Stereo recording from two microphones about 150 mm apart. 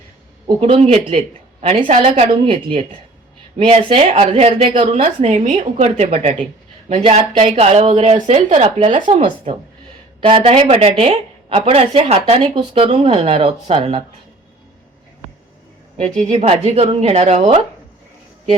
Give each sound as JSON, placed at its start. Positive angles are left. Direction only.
{"t": 0.6, "sound": "a woman's voice", "side_deg": -45}
{"t": 9.2, "sound": "a woman's voice", "side_deg": -40}
{"t": 16.1, "sound": "a woman's voice", "side_deg": -50}